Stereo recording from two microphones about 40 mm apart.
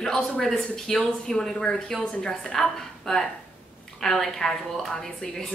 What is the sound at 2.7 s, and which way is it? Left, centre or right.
A woman's voice, centre.